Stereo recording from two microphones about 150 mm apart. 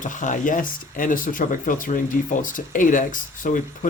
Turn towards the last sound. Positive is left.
turn(degrees=60)  # may be behind; listen again after turning